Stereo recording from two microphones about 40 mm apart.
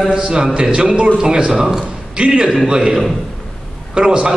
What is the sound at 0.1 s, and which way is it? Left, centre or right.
A man's voice, right.